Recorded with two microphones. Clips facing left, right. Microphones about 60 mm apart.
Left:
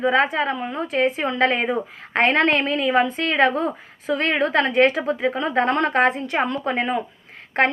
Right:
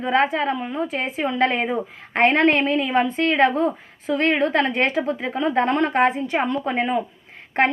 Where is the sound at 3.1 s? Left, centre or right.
Right.